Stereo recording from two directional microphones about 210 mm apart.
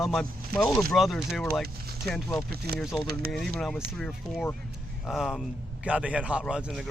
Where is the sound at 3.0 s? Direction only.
45° right (ahead or behind).